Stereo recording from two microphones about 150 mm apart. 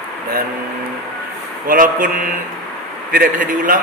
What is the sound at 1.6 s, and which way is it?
Speech, 70° right (ahead or behind).